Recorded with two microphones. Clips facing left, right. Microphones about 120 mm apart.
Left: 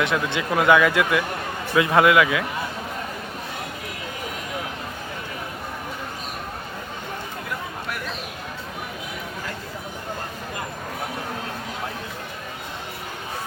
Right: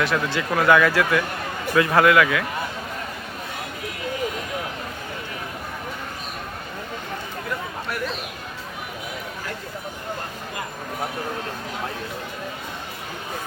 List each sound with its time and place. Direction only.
0.0 s speech: 20° left (ahead or behind)